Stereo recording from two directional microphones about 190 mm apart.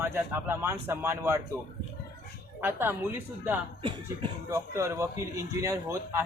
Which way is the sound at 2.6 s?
10° right (ahead or behind).